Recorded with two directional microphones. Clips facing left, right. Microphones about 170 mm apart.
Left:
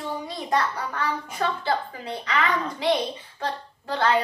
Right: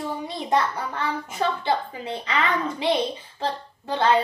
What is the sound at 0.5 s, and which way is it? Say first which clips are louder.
A child's voice: right 2 dB; 25° right (ahead or behind).